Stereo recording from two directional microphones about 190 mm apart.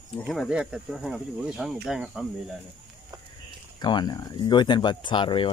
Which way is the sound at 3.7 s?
20° left (ahead or behind).